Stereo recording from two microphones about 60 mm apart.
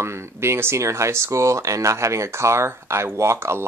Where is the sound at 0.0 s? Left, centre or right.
Right.